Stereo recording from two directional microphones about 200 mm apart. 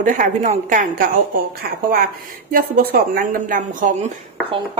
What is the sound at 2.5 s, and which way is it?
Speech, 45° right (ahead or behind).